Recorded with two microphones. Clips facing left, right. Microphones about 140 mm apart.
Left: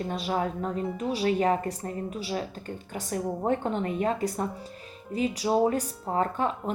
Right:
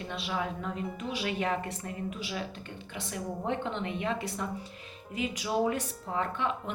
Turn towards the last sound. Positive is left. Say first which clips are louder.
# left 5 dB
turn(degrees=40)  # may be behind; listen again after turning